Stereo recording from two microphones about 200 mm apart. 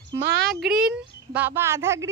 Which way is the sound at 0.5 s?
Centre (ahead or behind).